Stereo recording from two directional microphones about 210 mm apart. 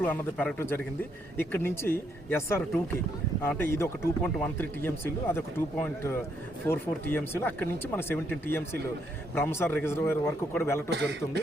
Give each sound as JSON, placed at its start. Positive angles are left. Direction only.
{"t": 0.0, "sound": "speech", "side_deg": 10}
{"t": 10.9, "sound": "a man's voice", "side_deg": -55}